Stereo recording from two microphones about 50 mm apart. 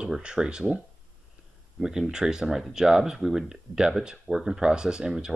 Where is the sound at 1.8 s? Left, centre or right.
Centre.